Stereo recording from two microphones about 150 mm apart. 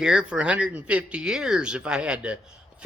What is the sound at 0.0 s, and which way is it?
Speech, 5° right (ahead or behind).